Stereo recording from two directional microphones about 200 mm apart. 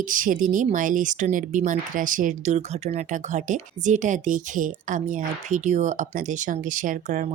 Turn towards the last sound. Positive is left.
turn(degrees=-40)  # may be behind; listen again after turning